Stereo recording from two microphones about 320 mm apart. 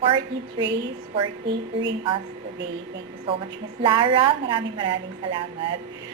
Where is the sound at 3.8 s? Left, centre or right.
Centre.